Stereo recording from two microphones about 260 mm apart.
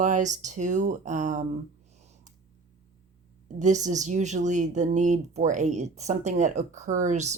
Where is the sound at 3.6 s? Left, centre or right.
Right.